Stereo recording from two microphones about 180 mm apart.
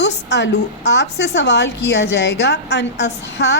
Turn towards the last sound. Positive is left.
turn(degrees=75)  # may be behind; listen again after turning